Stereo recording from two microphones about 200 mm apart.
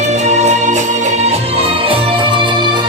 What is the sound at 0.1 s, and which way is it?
Music, 35° right (ahead or behind).